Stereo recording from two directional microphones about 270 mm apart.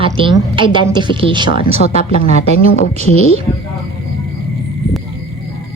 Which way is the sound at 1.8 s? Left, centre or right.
Left.